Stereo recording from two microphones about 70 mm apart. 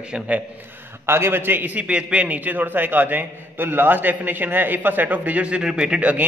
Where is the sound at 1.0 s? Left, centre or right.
Right.